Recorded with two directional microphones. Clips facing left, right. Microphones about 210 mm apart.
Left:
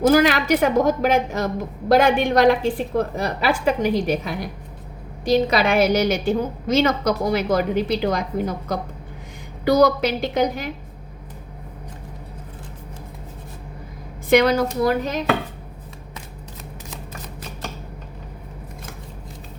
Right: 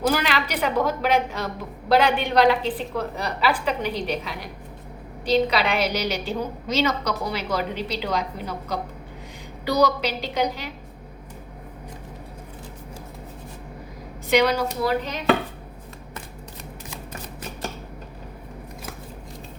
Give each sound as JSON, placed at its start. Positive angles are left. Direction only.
{"t": 0.1, "sound": "a woman's voice", "side_deg": 45}
{"t": 14.3, "sound": "a woman's voice", "side_deg": 50}